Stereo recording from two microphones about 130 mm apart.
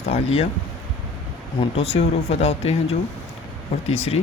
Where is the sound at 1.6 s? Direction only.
50° left (ahead or behind).